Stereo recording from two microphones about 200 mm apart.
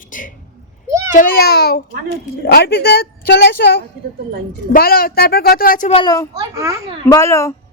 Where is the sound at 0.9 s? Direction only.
15° right (ahead or behind).